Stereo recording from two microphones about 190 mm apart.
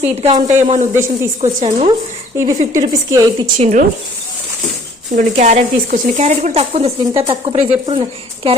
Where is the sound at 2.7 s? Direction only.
15° right (ahead or behind).